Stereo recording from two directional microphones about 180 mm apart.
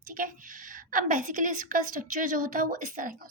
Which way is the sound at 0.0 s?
50° right (ahead or behind).